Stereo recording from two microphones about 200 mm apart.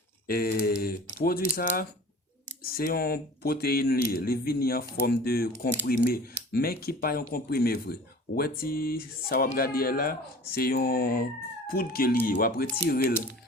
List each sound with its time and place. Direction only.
0.3 s speech: 50° left (ahead or behind)